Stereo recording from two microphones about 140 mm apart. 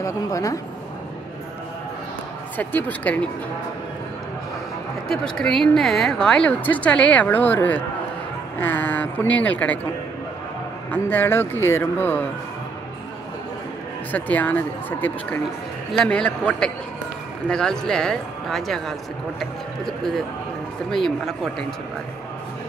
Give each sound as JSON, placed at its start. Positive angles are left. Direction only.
{"t": 0.0, "sound": "speech", "side_deg": 25}
{"t": 2.5, "sound": "speech", "side_deg": 10}
{"t": 5.0, "sound": "speech", "side_deg": 5}
{"t": 10.9, "sound": "speech", "side_deg": 15}
{"t": 14.1, "sound": "speech", "side_deg": 10}